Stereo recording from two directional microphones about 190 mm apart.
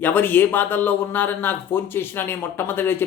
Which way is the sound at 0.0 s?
10° left (ahead or behind).